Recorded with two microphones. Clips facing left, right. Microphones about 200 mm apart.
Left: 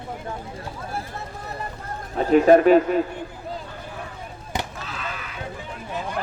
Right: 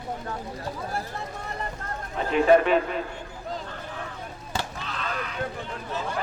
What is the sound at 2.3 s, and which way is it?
Speech, 40° left (ahead or behind).